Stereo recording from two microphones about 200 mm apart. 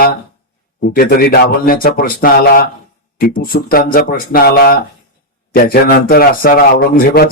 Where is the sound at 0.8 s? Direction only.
50° left (ahead or behind).